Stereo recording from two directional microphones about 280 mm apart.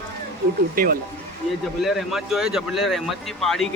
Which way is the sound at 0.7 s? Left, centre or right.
Right.